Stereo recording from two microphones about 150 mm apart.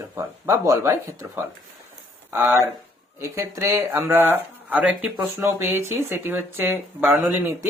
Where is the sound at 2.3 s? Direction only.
15° right (ahead or behind).